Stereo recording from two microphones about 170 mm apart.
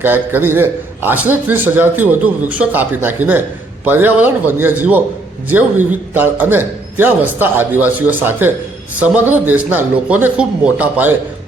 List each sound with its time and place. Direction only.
0.0 s a man's voice: 10° right (ahead or behind)